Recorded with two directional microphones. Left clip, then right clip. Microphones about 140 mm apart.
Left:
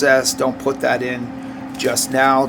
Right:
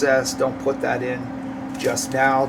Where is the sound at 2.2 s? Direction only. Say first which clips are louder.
Left 4 dB; 90° left.